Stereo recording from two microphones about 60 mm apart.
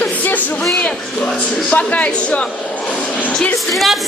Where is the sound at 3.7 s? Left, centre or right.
Centre.